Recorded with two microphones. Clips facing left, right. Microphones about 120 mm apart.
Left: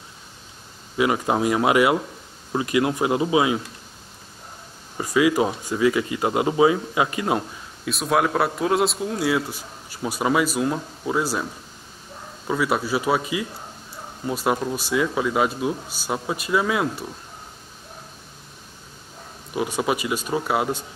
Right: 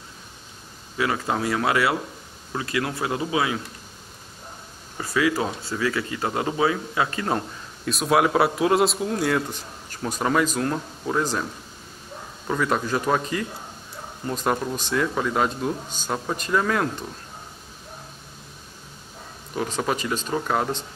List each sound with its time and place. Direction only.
0.9 s speech: 20° left (ahead or behind)
4.9 s speech: 15° left (ahead or behind)
7.9 s a man's voice: centre (ahead or behind)
12.4 s speech: 5° left (ahead or behind)
19.5 s speech: 10° left (ahead or behind)